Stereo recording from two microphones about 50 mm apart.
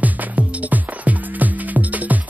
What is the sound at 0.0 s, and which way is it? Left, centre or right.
Music, right.